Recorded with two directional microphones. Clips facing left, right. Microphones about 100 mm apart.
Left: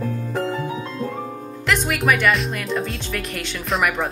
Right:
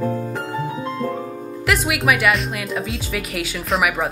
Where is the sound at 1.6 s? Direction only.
5° right (ahead or behind).